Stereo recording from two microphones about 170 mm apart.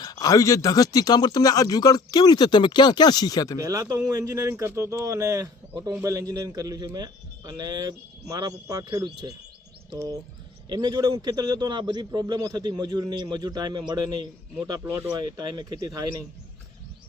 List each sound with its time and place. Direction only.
0.0 s speech: 20° left (ahead or behind)
3.6 s speech: 20° right (ahead or behind)
10.7 s speech: 25° right (ahead or behind)